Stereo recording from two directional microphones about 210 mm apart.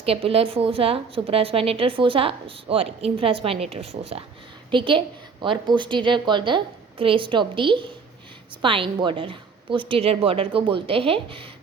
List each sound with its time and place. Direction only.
0.0 s a woman's voice: 25° right (ahead or behind)